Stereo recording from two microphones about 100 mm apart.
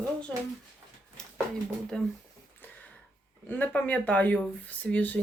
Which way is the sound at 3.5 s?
15° left (ahead or behind).